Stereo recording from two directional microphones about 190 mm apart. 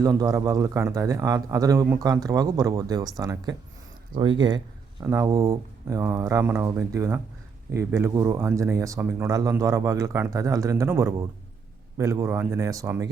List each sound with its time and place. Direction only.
0.0 s a man's voice: 20° right (ahead or behind)